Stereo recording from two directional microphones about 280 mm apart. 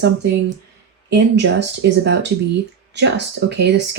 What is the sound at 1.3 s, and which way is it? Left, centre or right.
Speech, right.